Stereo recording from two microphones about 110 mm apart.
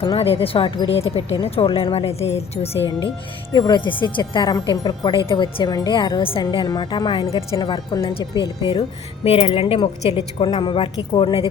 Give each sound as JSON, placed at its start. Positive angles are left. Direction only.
{"t": 0.0, "sound": "a woman's voice", "side_deg": 60}
{"t": 3.5, "sound": "speech", "side_deg": 40}
{"t": 9.2, "sound": "a woman's voice", "side_deg": 60}